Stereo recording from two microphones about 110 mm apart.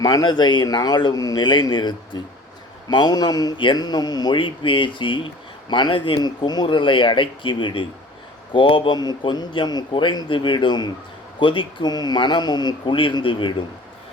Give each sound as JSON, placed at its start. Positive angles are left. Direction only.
{"t": 0.0, "sound": "a man's voice", "side_deg": 40}